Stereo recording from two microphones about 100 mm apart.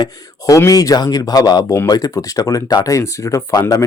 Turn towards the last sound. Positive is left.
turn(degrees=35)  # may be behind; listen again after turning